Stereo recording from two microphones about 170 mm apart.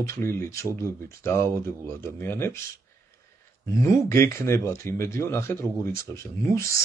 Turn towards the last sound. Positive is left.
turn(degrees=15)  # may be behind; listen again after turning